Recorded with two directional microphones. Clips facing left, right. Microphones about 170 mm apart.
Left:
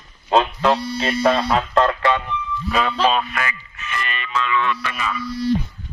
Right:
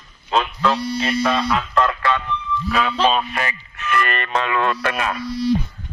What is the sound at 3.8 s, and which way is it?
Speech, 60° right (ahead or behind).